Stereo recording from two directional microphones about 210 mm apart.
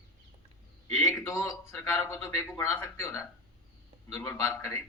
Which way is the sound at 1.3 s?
10° left (ahead or behind).